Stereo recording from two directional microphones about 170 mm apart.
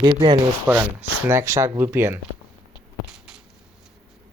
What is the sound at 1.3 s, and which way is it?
Speech, 15° right (ahead or behind).